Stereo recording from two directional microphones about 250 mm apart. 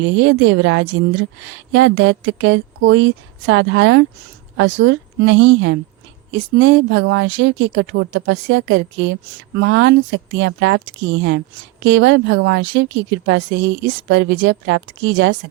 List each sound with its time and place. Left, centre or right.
0.0 s speech: right